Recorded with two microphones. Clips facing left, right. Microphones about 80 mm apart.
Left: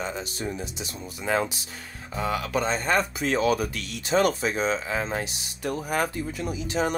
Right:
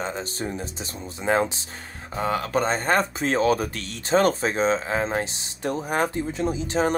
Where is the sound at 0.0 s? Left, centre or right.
Right.